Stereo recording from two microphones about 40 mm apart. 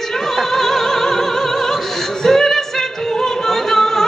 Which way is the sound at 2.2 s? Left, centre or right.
Centre.